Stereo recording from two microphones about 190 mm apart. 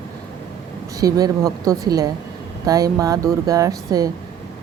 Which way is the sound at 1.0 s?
20° right (ahead or behind).